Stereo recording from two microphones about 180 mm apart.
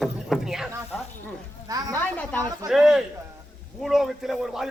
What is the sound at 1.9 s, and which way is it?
Speech, 10° left (ahead or behind).